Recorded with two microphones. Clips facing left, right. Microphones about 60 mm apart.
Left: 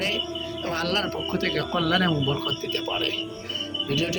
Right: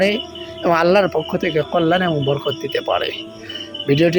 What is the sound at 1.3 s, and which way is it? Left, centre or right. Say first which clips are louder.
Speech: right 7 dB; right.